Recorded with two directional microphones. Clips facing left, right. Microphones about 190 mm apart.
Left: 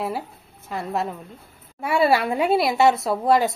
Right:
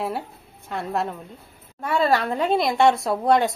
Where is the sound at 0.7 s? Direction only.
Centre (ahead or behind).